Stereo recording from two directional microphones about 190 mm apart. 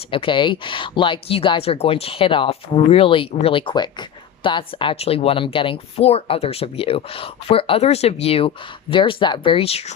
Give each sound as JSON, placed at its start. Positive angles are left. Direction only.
{"t": 0.1, "sound": "speech", "side_deg": 25}